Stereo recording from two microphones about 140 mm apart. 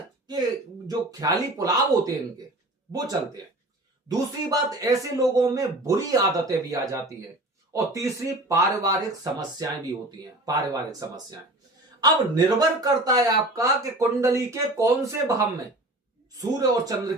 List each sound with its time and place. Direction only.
0.9 s speech: 25° right (ahead or behind)